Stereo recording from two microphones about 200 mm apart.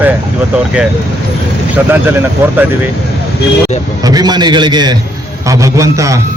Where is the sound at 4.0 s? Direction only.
20° right (ahead or behind).